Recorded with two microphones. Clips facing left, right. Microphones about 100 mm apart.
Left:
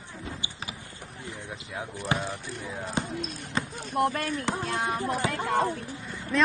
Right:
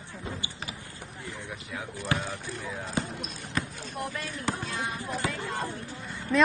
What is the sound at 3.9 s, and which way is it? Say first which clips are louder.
Speech: left 10 dB; 60° left (ahead or behind).